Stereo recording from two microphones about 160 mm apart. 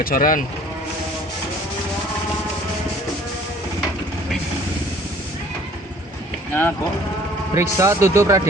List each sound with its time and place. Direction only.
0.0 s speech: 60° left (ahead or behind)
6.5 s speech: 10° left (ahead or behind)
7.5 s speech: 20° right (ahead or behind)